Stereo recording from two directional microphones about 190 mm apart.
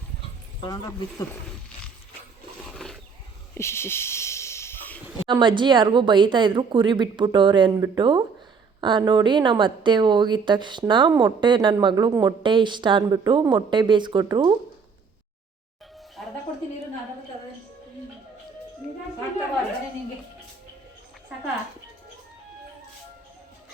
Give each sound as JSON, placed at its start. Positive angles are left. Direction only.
{"t": 0.6, "sound": "speech", "side_deg": 20}
{"t": 2.6, "sound": "roaring cats", "side_deg": 0}
{"t": 3.5, "sound": "a sound", "side_deg": 15}
{"t": 5.3, "sound": "a woman's voice", "side_deg": -25}
{"t": 16.2, "sound": "music", "side_deg": 0}